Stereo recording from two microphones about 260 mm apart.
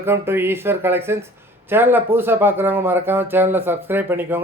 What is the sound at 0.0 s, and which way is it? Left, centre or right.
Speech, centre.